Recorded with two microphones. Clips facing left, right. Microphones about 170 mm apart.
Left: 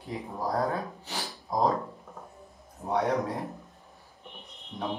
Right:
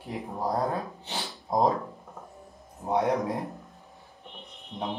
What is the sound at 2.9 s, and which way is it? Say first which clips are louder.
Speech: right 2 dB; 20° right (ahead or behind).